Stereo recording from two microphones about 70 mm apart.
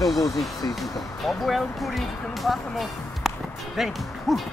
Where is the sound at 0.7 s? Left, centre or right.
Centre.